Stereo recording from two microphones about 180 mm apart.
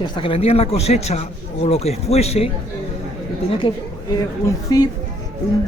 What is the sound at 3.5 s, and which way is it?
A woman's voice, 25° left (ahead or behind).